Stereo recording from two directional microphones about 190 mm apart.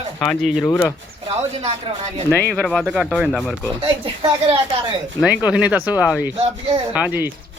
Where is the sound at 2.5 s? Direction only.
Centre (ahead or behind).